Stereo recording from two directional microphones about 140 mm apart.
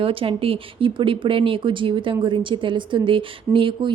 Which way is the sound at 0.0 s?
40° right (ahead or behind).